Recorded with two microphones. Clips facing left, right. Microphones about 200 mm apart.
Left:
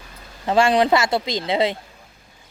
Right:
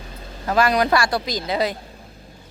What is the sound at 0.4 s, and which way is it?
Speech, 25° left (ahead or behind).